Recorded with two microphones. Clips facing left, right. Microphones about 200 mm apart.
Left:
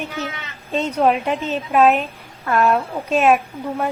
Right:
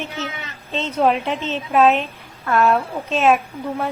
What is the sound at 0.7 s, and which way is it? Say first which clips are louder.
Speech: left 4 dB; 15° left (ahead or behind).